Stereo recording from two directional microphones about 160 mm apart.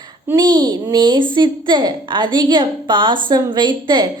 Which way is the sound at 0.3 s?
25° right (ahead or behind).